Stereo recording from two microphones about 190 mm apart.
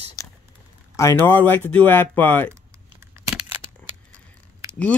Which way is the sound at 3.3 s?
5° right (ahead or behind).